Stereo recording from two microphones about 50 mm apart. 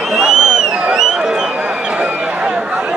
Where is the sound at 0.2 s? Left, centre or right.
Centre.